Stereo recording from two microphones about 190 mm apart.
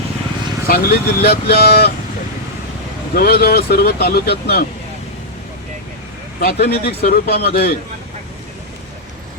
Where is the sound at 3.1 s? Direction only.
55° left (ahead or behind).